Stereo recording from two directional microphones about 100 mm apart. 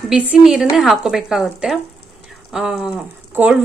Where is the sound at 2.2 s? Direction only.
5° right (ahead or behind).